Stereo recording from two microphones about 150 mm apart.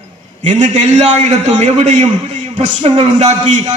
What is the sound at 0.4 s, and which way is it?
A man's voice, 50° right (ahead or behind).